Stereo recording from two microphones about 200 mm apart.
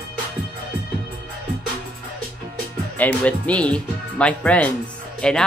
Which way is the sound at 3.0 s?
5° left (ahead or behind).